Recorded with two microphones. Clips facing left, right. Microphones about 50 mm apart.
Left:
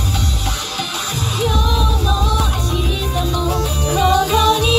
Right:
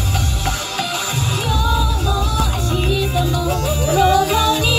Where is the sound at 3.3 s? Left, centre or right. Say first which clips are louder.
Even; centre.